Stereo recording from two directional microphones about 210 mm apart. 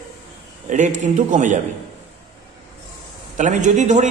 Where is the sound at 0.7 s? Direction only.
35° right (ahead or behind).